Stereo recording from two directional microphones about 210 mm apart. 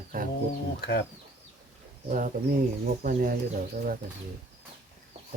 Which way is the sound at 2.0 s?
35° right (ahead or behind).